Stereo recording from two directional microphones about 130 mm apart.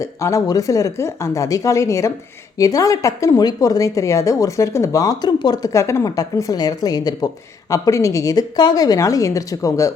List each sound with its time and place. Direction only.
0.0 s a woman's voice: 25° left (ahead or behind)